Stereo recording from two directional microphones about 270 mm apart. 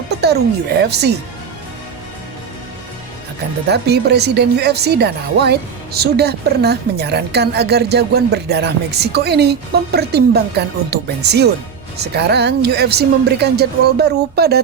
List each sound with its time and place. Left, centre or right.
0.2 s speech: right
3.7 s speech: right